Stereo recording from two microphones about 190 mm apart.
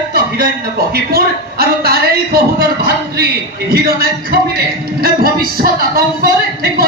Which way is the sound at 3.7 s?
55° right (ahead or behind).